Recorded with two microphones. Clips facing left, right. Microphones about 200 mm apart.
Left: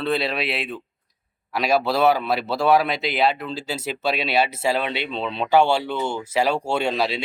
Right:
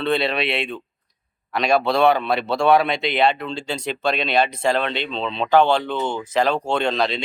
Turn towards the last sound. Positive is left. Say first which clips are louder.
# right 1 dB
turn(degrees=10)  # may be behind; listen again after turning